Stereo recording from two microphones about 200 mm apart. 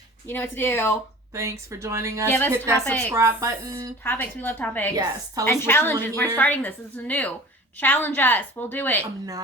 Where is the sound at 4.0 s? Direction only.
10° left (ahead or behind).